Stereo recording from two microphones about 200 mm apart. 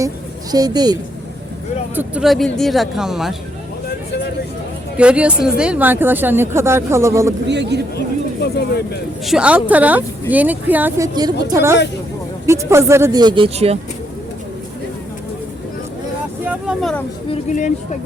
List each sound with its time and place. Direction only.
0.5 s speech: 20° right (ahead or behind)
2.0 s speech: 5° right (ahead or behind)
4.9 s speech: 5° right (ahead or behind)
7.4 s speech: 60° right (ahead or behind)
8.5 s speech: 55° left (ahead or behind)
9.2 s speech: 5° right (ahead or behind); by 13.7 s 30° right (ahead or behind)
16.4 s vehicle: 5° right (ahead or behind)
17.5 s speech: 35° left (ahead or behind)